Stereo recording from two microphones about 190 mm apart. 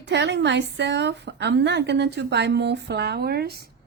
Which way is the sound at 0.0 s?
65° right (ahead or behind).